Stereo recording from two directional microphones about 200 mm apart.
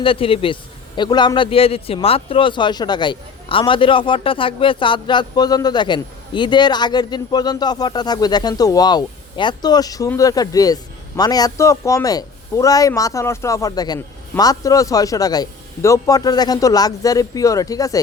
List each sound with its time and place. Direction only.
0.0 s a man's voice: 25° left (ahead or behind)